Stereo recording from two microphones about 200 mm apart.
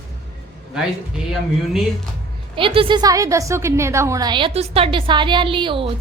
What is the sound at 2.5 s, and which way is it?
A woman's voice, 25° right (ahead or behind).